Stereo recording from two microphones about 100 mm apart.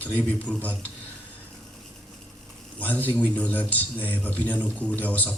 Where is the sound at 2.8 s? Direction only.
15° left (ahead or behind).